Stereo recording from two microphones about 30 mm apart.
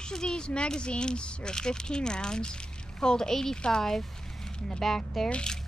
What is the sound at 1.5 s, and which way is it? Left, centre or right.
Speech, left.